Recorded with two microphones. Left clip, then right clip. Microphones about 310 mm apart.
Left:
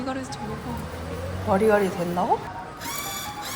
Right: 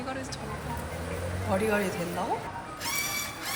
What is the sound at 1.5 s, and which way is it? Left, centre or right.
Speech, left.